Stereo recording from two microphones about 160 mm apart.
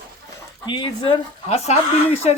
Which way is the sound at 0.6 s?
30° left (ahead or behind).